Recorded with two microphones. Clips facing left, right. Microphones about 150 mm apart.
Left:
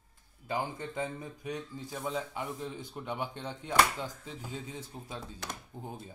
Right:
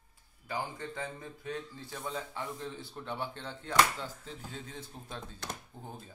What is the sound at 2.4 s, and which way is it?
Speech, 15° left (ahead or behind).